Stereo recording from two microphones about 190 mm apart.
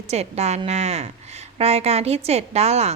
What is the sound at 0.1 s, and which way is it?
A woman's voice, 35° right (ahead or behind).